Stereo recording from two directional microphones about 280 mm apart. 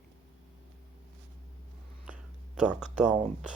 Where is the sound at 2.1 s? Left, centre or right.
Centre.